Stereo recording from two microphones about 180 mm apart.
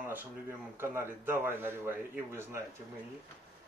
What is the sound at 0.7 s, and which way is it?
A man's voice, 10° right (ahead or behind).